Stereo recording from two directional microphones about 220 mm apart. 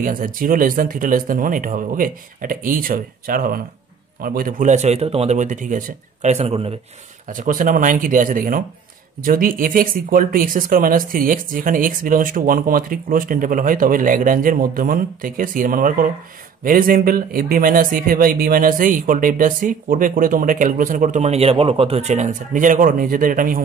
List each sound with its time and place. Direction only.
0.0 s speech: 40° right (ahead or behind)
7.2 s speech: 40° right (ahead or behind)